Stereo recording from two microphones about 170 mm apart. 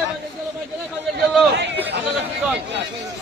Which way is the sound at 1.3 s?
5° right (ahead or behind).